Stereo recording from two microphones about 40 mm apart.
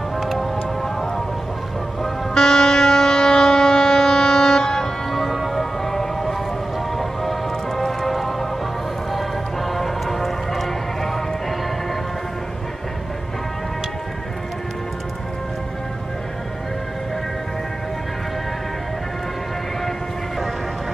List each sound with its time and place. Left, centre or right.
0.2 s music: centre
2.3 s shofar: centre
7.0 s music: centre